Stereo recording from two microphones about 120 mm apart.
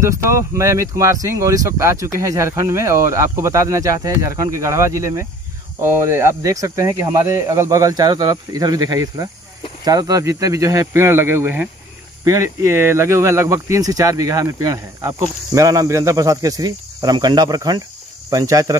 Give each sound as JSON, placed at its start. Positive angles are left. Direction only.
{"t": 0.0, "sound": "speech", "side_deg": -25}